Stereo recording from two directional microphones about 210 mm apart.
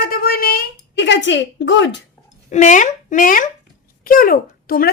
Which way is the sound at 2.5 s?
35° left (ahead or behind).